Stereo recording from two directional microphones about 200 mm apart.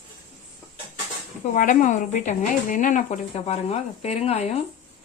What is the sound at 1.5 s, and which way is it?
Speech, 40° left (ahead or behind).